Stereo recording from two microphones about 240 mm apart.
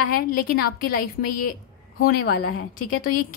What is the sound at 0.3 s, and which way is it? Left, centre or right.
A woman's voice, left.